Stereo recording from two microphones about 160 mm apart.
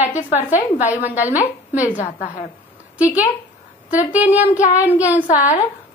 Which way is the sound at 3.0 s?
10° right (ahead or behind).